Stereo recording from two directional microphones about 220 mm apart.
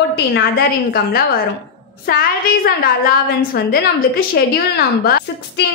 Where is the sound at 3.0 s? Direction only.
45° left (ahead or behind).